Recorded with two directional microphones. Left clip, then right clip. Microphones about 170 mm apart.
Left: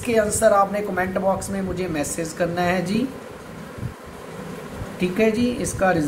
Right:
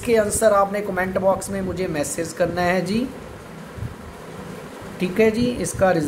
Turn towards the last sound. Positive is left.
turn(degrees=-50)  # may be behind; listen again after turning